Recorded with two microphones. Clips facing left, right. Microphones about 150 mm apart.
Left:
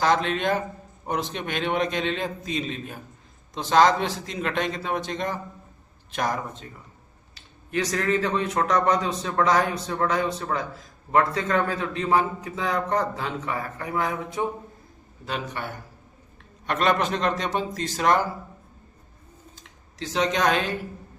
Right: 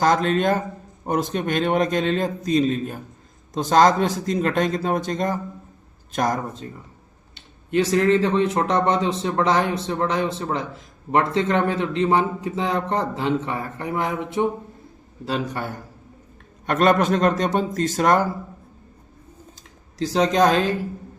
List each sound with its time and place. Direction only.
0.0 s a man's voice: 45° right (ahead or behind)
7.3 s speech: 25° right (ahead or behind)
15.2 s speech: 35° right (ahead or behind)
16.6 s a man's voice: 45° right (ahead or behind)
20.0 s speech: 35° right (ahead or behind)